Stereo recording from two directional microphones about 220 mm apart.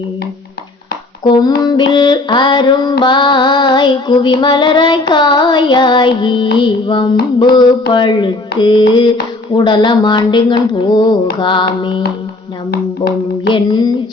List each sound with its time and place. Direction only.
1.2 s female singing: 20° left (ahead or behind)
12.7 s a sound: 45° left (ahead or behind)
13.5 s female singing: 20° left (ahead or behind)